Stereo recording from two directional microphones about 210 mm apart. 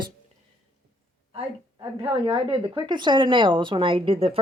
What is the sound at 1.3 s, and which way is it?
A woman's voice, 25° right (ahead or behind).